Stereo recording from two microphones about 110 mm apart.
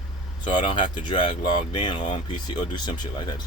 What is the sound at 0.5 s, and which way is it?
Speech, 50° left (ahead or behind).